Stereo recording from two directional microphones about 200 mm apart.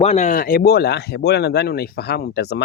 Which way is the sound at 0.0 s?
35° left (ahead or behind).